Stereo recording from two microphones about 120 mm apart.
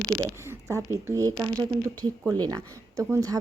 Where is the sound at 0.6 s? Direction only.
25° right (ahead or behind).